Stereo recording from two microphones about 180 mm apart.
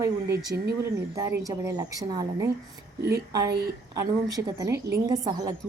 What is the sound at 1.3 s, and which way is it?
A woman's voice, 20° right (ahead or behind).